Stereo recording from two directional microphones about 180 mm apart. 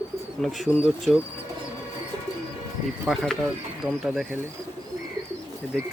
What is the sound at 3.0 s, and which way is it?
Speech, centre (ahead or behind).